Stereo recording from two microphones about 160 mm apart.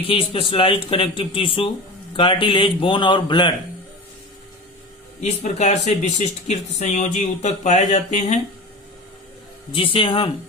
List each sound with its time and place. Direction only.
0.1 s speech: 35° left (ahead or behind)
5.2 s speech: 45° left (ahead or behind)
9.7 s speech: 35° left (ahead or behind)